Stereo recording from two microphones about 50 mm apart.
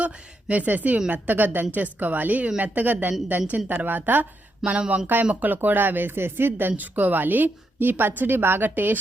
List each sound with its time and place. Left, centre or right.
0.0 s a woman's voice: right